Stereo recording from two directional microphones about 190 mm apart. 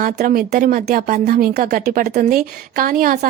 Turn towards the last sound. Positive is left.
turn(degrees=-50)  # may be behind; listen again after turning